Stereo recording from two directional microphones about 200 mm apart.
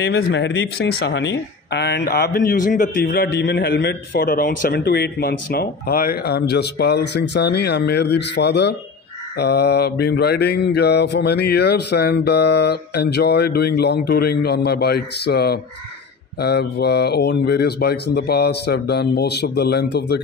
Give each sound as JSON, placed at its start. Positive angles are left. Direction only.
{"t": 0.0, "sound": "speech", "side_deg": 60}
{"t": 9.4, "sound": "mantra", "side_deg": 55}